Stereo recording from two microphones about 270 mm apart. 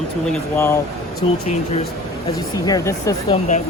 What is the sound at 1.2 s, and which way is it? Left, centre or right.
Speech, centre.